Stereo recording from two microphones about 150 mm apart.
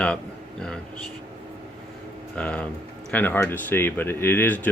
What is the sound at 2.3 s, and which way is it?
Speech, 10° left (ahead or behind).